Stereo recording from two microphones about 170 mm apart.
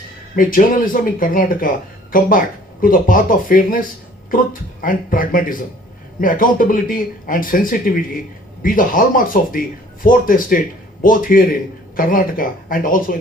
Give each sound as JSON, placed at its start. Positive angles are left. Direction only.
{"t": 0.3, "sound": "speech", "side_deg": 55}